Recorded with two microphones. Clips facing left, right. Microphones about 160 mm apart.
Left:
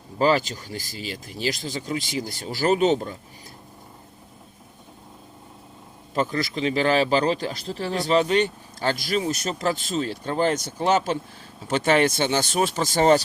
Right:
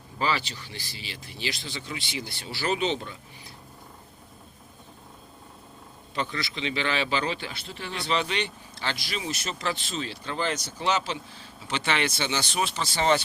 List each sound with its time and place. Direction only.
0.2 s speech: 45° left (ahead or behind)
6.1 s speech: 45° left (ahead or behind)